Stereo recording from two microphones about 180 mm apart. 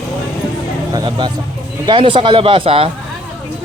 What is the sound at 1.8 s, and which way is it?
Speech, 25° right (ahead or behind).